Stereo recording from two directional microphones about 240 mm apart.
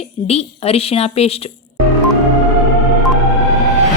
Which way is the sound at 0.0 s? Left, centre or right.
Left.